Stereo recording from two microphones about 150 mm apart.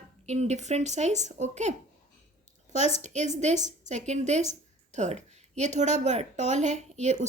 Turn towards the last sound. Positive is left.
turn(degrees=-50)  # may be behind; listen again after turning